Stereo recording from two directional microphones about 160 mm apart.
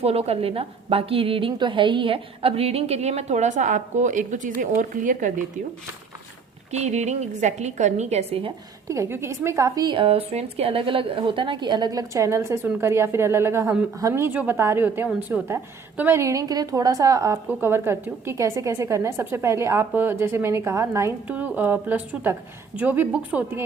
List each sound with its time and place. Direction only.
0.0 s a woman's voice: 40° right (ahead or behind); by 5.3 s 55° right (ahead or behind)
6.7 s a woman's voice: 45° right (ahead or behind)
8.9 s a woman's voice: 15° right (ahead or behind)